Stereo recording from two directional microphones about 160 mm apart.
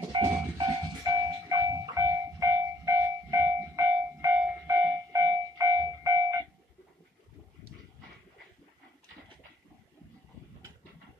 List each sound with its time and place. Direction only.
0.1 s train: 35° right (ahead or behind)
0.6 s train: 20° right (ahead or behind)